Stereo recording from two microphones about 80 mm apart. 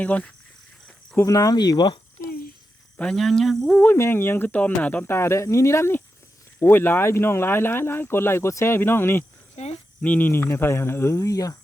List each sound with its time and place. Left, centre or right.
0.0 s speech: centre
1.2 s speech: left
3.0 s speech: centre
3.8 s speech: left
5.1 s speech: left